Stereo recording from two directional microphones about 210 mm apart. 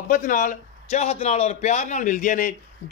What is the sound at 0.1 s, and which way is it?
A man's voice, 40° left (ahead or behind).